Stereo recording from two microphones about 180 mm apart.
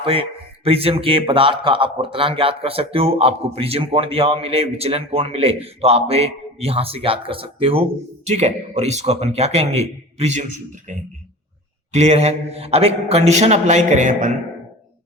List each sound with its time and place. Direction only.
0.0 s a man's voice: 30° right (ahead or behind)